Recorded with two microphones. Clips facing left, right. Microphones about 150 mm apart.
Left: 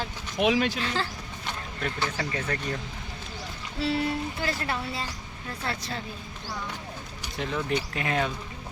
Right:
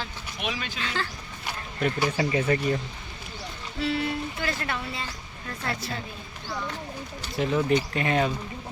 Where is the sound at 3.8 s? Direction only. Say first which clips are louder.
Even; 35° left (ahead or behind).